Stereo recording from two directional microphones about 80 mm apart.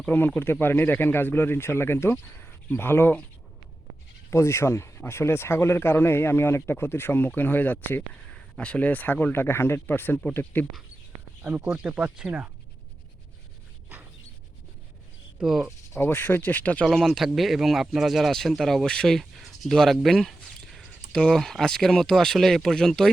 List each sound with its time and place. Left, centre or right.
0.1 s speech: left
4.3 s speech: left
8.3 s speech: centre
11.4 s speech: right
15.4 s speech: centre
15.9 s speech: left
16.8 s speech: centre